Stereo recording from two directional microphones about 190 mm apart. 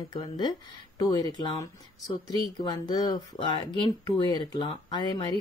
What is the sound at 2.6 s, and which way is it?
Speech, 20° left (ahead or behind).